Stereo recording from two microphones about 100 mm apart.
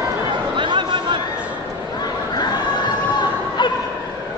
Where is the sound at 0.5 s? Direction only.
55° right (ahead or behind).